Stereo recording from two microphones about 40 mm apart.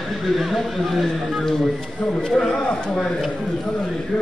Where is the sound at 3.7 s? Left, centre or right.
Centre.